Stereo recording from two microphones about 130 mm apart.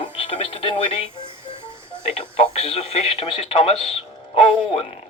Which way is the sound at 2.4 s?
50° left (ahead or behind).